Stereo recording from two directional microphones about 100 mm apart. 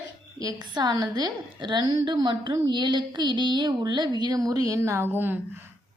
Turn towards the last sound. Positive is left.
turn(degrees=-20)  # may be behind; listen again after turning